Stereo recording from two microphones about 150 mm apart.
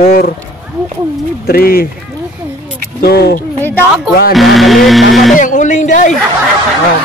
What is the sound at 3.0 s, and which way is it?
Speech, 90° left.